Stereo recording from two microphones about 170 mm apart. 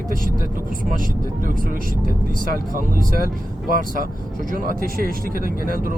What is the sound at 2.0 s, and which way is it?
Speech, 55° right (ahead or behind).